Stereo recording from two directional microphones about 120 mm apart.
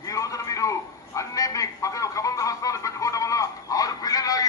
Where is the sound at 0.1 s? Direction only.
30° left (ahead or behind).